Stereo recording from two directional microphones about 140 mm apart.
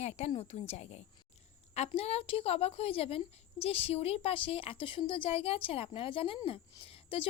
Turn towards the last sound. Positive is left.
turn(degrees=40)  # may be behind; listen again after turning